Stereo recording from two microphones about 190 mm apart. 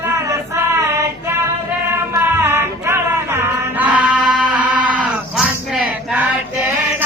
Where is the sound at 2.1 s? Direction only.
10° right (ahead or behind).